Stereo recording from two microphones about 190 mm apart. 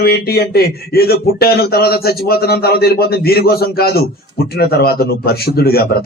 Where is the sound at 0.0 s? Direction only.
55° left (ahead or behind).